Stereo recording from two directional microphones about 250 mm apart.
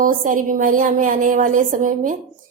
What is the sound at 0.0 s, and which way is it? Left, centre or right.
A woman's voice, right.